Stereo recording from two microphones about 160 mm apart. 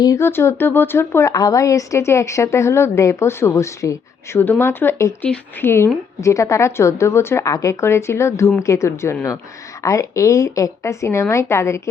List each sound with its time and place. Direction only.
0.0 s a woman's voice: 20° left (ahead or behind)